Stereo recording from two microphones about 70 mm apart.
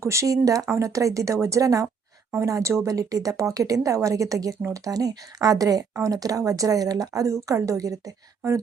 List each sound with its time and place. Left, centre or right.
0.0 s speech: right